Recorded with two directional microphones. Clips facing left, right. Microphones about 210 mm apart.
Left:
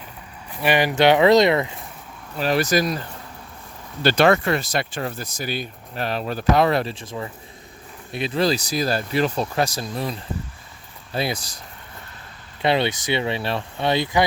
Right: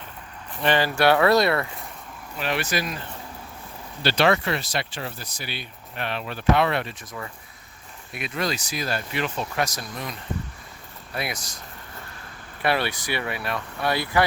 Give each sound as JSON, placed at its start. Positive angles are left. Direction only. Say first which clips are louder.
{"t": 0.6, "sound": "speech", "louder": "left 3 dB", "side_deg": 15}
{"t": 2.4, "sound": "speech", "louder": "left 7 dB", "side_deg": 40}
{"t": 4.0, "sound": "speech", "louder": "left 4 dB", "side_deg": 50}
{"t": 12.6, "sound": "speech", "louder": "left 4 dB", "side_deg": 20}